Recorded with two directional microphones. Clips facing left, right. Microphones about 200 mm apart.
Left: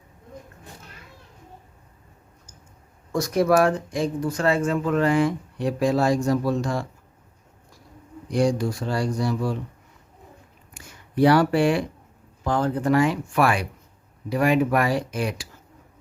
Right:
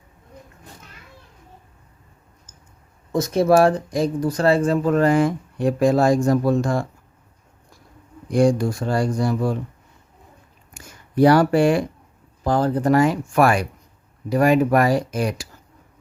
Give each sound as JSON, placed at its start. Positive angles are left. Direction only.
{"t": 3.1, "sound": "speech", "side_deg": -25}
{"t": 8.3, "sound": "speech", "side_deg": -50}
{"t": 10.8, "sound": "speech", "side_deg": -45}